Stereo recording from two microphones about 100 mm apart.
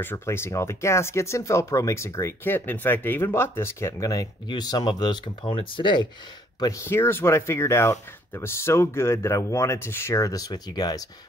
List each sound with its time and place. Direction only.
0.0 s speech: 25° left (ahead or behind)
4.5 s speech: 45° left (ahead or behind)
6.6 s speech: 30° left (ahead or behind)